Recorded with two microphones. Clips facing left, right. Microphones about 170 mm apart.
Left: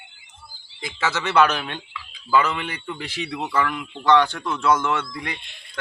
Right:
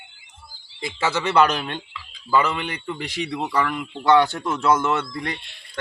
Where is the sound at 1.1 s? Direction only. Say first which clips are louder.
Even; 5° left (ahead or behind).